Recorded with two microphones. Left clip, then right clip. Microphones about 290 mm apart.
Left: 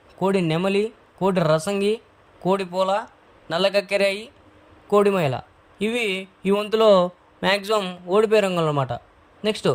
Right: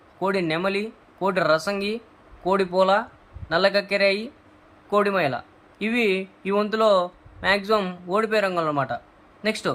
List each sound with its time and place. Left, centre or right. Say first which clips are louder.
0.2 s speech: left 2 dB; left